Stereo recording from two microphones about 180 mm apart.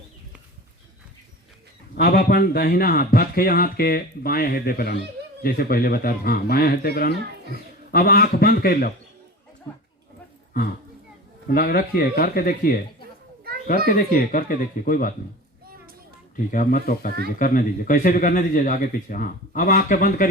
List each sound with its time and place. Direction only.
2.0 s a man's voice: 60° left (ahead or behind)
11.4 s a man's voice: 55° left (ahead or behind)
13.8 s speech: 50° left (ahead or behind)
16.5 s speech: 50° left (ahead or behind)